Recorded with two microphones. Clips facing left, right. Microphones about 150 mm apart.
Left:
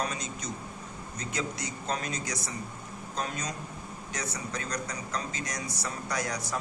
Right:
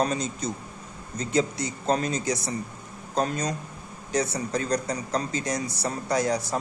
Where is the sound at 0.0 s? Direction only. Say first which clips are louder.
Right 8 dB; 30° right (ahead or behind).